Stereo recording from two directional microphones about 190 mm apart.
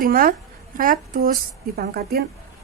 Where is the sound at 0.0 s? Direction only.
45° right (ahead or behind).